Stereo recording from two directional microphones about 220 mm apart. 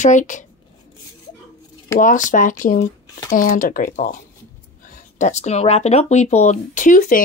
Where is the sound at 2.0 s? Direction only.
35° left (ahead or behind).